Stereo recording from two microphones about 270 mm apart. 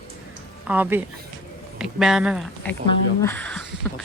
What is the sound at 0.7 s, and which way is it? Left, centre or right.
A woman's voice, centre.